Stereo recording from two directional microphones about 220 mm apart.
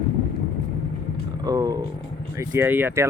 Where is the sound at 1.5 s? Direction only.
15° right (ahead or behind).